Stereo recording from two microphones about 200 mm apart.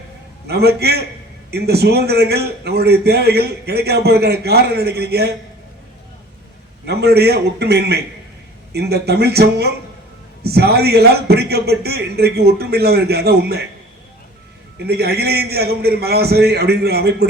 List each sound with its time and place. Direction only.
0.4 s a man's voice: 55° right (ahead or behind)
6.8 s a man's voice: 55° right (ahead or behind)
14.8 s a man's voice: 55° right (ahead or behind)